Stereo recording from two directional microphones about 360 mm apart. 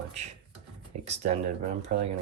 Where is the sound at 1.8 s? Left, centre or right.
Centre.